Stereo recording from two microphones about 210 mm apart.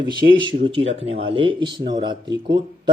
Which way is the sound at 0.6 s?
25° right (ahead or behind).